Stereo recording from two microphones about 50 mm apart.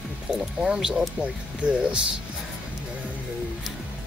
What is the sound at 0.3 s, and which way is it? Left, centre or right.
Speech, centre.